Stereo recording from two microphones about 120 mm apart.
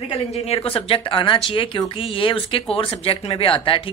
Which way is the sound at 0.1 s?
60° left (ahead or behind).